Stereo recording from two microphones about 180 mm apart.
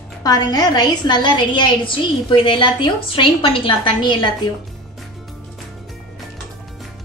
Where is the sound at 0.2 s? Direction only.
20° left (ahead or behind).